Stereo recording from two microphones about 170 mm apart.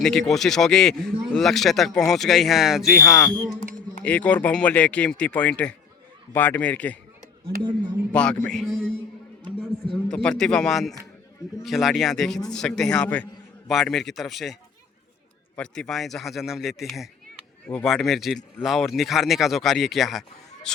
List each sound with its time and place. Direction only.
0.0 s speech: centre (ahead or behind)
7.4 s speech: 30° right (ahead or behind)
8.1 s speech: 5° left (ahead or behind)
10.1 s speech: 5° left (ahead or behind)